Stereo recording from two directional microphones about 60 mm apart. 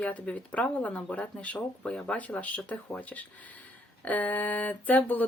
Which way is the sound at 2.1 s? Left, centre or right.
Left.